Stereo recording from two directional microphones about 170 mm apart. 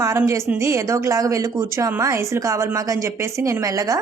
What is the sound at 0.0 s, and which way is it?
Speech, 15° right (ahead or behind).